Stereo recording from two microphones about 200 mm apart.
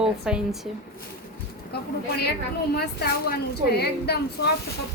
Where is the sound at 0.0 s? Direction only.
5° right (ahead or behind).